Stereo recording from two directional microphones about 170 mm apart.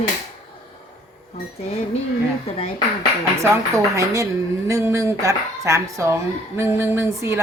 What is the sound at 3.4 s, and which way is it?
Speech, 15° right (ahead or behind).